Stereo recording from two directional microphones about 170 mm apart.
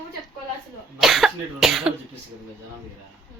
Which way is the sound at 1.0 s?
Centre (ahead or behind).